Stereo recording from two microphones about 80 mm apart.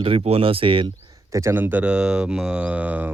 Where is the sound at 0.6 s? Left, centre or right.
Right.